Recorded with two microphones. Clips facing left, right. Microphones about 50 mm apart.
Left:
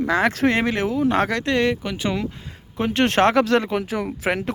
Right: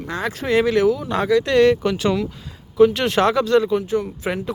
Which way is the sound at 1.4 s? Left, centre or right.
Left.